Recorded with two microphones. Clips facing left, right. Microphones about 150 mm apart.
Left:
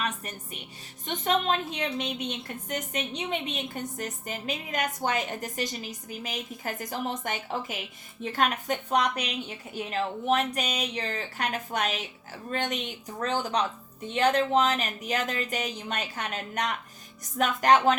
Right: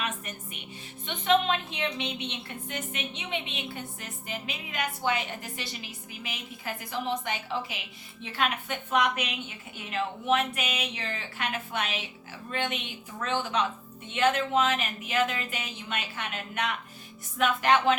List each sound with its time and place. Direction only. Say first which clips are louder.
0.0 s music: left 2 dB; 35° left (ahead or behind)
1.0 s a woman's voice: right 1 dB; 40° left (ahead or behind)